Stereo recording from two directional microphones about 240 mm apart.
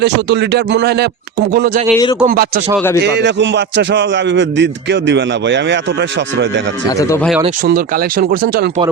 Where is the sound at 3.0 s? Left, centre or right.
Right.